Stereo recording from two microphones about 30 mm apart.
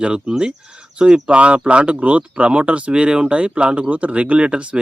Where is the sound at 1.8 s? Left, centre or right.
Right.